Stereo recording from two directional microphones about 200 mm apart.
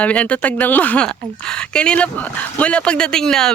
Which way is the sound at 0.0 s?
5° left (ahead or behind).